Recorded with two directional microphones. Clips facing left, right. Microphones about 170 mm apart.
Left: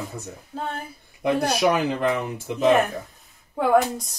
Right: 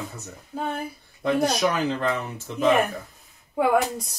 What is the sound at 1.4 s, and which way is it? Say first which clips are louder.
Speech: left 2 dB; 10° left (ahead or behind).